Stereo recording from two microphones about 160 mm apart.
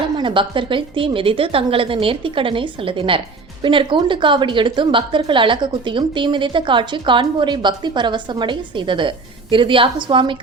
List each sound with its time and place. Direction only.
0.2 s a woman's voice: 30° right (ahead or behind)